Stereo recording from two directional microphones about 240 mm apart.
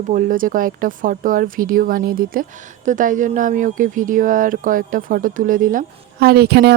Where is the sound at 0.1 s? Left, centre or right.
Right.